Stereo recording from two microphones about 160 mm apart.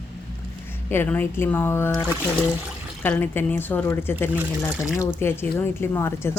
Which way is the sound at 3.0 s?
10° left (ahead or behind).